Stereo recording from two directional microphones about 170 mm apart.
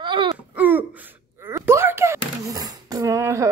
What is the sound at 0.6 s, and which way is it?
Speech, 10° right (ahead or behind).